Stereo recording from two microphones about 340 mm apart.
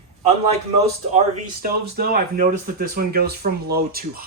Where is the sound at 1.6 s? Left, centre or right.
Right.